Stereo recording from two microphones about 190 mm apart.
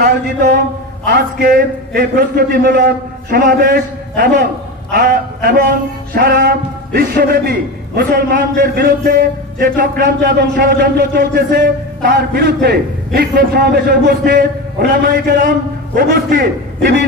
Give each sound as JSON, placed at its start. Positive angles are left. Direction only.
{"t": 0.0, "sound": "a man's voice", "side_deg": -55}